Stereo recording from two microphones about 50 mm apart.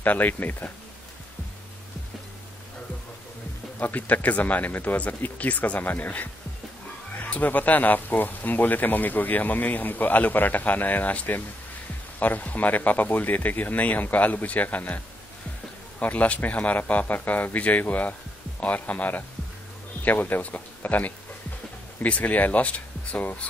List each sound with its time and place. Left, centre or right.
0.0 s speech: left
3.8 s speech: left
16.0 s speech: left